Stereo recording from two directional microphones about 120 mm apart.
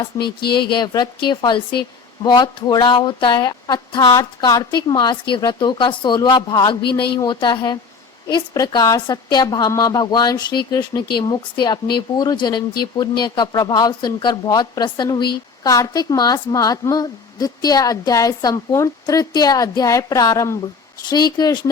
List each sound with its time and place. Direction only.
0.0 s a woman's voice: 40° left (ahead or behind)
21.1 s a woman's voice: 35° left (ahead or behind)